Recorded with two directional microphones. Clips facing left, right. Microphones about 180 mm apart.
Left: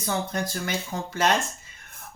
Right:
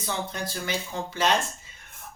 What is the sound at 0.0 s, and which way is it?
Speech, 45° left (ahead or behind).